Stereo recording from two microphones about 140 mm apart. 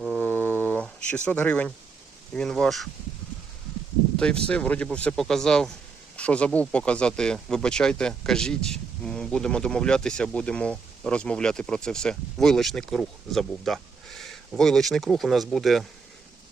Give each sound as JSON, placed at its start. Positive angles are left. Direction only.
{"t": 0.2, "sound": "a sound", "side_deg": 15}
{"t": 2.3, "sound": "speech", "side_deg": 5}
{"t": 4.2, "sound": "speech", "side_deg": 5}